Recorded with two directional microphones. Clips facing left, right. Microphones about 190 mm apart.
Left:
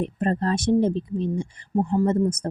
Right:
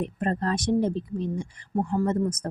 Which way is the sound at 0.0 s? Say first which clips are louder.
Left 3 dB; 30° left (ahead or behind).